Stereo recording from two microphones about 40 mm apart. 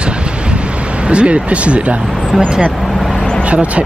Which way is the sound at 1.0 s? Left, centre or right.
Right.